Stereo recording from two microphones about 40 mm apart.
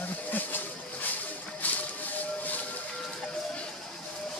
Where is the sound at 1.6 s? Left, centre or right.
Left.